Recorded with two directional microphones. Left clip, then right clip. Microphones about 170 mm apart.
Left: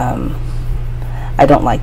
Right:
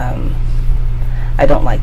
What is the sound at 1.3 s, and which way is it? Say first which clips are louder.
Speech: left 4 dB; 25° left (ahead or behind).